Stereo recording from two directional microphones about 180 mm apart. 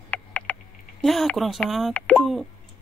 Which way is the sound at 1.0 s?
Centre (ahead or behind).